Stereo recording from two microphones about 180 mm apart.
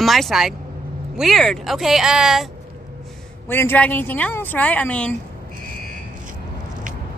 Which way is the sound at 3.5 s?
10° left (ahead or behind).